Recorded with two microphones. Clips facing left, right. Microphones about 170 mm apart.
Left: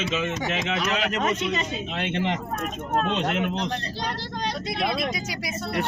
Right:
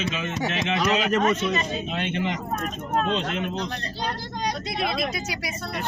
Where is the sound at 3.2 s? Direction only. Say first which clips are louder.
Left 2 dB; 60° left (ahead or behind).